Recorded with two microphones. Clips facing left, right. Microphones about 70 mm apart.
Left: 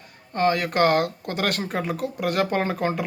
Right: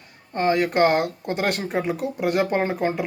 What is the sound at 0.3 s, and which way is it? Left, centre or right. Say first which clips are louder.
Speech: right 1 dB; right.